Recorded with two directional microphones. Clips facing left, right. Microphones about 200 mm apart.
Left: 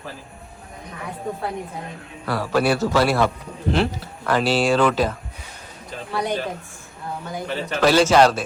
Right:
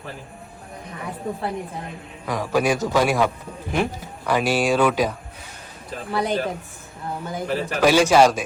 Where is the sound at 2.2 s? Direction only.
15° right (ahead or behind).